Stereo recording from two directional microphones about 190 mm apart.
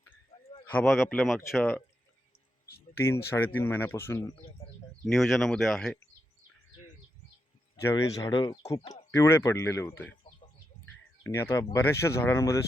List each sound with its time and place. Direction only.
0.7 s speech: 5° left (ahead or behind)
3.2 s speech: 10° left (ahead or behind)
5.0 s speech: centre (ahead or behind)
7.8 s speech: 15° left (ahead or behind)
11.3 s speech: 15° left (ahead or behind)